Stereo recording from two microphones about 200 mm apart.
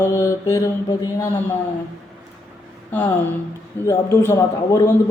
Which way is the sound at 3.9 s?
15° left (ahead or behind).